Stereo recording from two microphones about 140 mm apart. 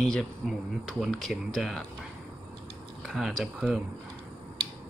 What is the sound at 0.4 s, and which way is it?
Speech, centre (ahead or behind).